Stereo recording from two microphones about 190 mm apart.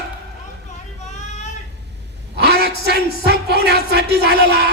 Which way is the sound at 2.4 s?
55° right (ahead or behind).